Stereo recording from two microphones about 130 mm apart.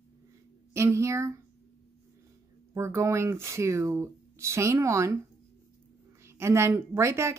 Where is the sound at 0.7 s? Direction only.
20° right (ahead or behind).